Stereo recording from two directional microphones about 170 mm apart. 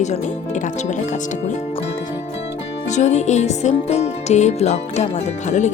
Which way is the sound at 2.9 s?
40° left (ahead or behind).